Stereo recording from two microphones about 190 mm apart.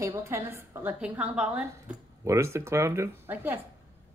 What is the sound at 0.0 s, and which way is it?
A woman's voice, 15° right (ahead or behind).